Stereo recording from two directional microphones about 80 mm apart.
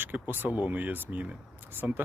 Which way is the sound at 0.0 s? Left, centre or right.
Right.